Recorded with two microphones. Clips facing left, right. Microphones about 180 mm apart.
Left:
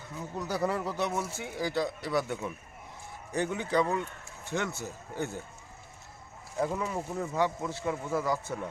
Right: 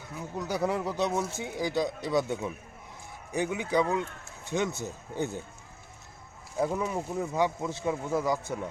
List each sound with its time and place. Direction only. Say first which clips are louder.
0.2 s speech: right 1 dB; 15° right (ahead or behind)
6.7 s speech: right 2 dB; 15° right (ahead or behind)